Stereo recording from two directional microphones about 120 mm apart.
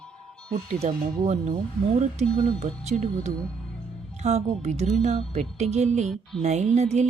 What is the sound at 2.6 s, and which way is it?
Speech, 65° right (ahead or behind).